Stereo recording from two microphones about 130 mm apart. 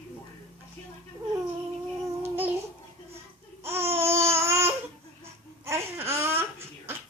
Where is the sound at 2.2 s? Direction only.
15° right (ahead or behind).